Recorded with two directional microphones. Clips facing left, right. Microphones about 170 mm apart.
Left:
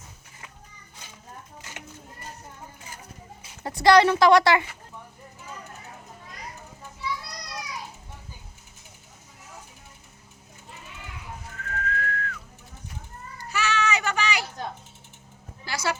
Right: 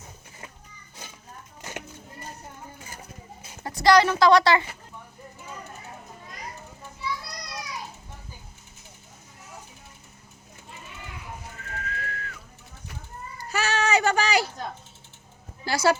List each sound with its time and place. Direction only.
3.8 s a woman's voice: 25° left (ahead or behind)
11.5 s whistling: 10° right (ahead or behind)
13.4 s a sound: 40° right (ahead or behind)
15.6 s speech: 35° right (ahead or behind)